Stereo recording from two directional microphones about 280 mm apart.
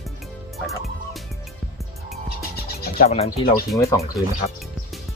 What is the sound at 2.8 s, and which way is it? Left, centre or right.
Speech, left.